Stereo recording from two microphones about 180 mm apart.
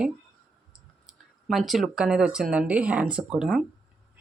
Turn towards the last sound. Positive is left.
turn(degrees=-5)  # may be behind; listen again after turning